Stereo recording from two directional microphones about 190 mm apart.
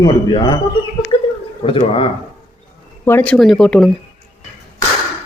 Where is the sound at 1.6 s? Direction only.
30° left (ahead or behind).